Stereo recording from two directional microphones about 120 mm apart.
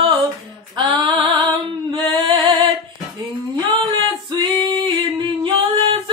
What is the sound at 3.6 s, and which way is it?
Female singing, 35° right (ahead or behind).